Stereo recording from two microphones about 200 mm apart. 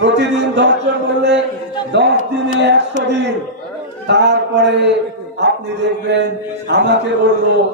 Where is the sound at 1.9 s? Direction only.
60° right (ahead or behind).